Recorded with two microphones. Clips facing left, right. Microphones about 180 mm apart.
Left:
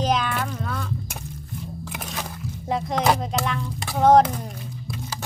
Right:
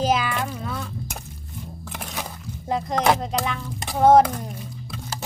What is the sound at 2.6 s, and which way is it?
Speech, centre (ahead or behind).